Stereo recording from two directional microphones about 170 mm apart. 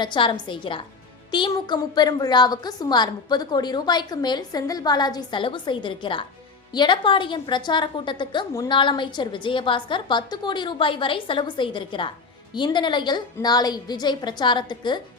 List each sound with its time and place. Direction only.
0.0 s a woman's voice: 30° left (ahead or behind)